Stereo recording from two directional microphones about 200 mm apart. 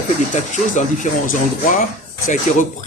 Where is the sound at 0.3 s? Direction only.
35° left (ahead or behind).